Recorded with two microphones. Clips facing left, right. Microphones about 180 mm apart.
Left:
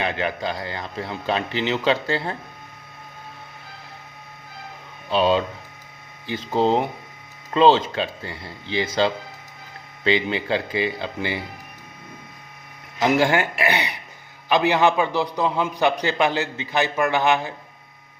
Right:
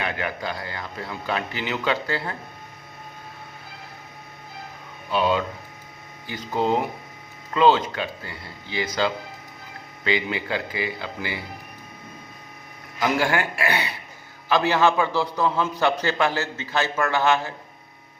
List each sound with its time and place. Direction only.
0.0 s a man's voice: 25° left (ahead or behind)
5.1 s a man's voice: 25° left (ahead or behind)
13.0 s a man's voice: 25° left (ahead or behind)